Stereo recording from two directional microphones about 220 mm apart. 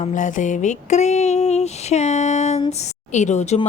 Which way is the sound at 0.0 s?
35° left (ahead or behind).